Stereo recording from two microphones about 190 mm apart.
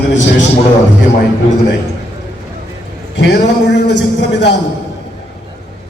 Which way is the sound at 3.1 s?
65° left (ahead or behind).